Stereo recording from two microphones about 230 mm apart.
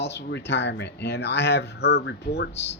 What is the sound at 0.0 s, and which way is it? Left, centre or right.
Speech, left.